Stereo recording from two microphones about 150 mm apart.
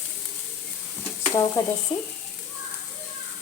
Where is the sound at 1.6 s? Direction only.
20° left (ahead or behind).